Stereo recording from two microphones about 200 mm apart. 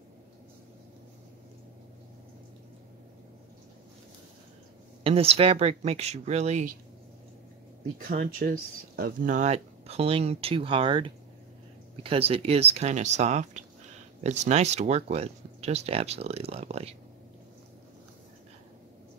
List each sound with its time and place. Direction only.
5.0 s speech: 30° right (ahead or behind)
8.1 s speech: 45° right (ahead or behind); by 16.9 s 30° right (ahead or behind)